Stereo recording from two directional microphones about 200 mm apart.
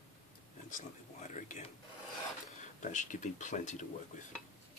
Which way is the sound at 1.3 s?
35° left (ahead or behind).